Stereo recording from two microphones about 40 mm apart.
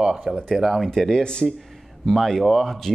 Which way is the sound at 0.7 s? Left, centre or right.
Centre.